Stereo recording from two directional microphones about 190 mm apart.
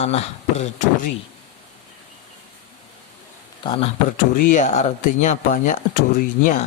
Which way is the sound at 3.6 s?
25° left (ahead or behind).